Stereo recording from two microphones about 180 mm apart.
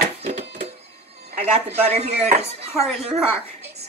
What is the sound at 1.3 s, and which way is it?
A woman's voice, 40° right (ahead or behind).